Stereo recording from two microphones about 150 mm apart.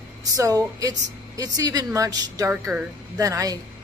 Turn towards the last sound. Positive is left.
turn(degrees=-20)  # may be behind; listen again after turning